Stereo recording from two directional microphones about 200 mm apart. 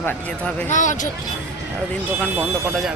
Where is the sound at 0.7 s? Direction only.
40° left (ahead or behind).